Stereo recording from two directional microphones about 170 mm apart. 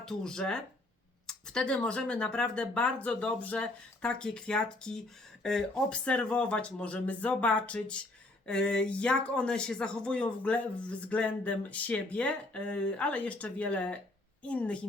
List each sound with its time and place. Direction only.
0.0 s speech: 5° left (ahead or behind)